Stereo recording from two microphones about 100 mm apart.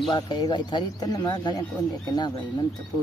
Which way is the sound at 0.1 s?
45° left (ahead or behind).